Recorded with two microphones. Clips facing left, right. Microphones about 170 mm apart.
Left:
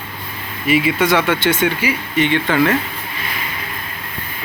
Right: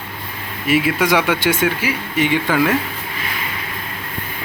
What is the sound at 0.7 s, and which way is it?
Speech, 5° right (ahead or behind).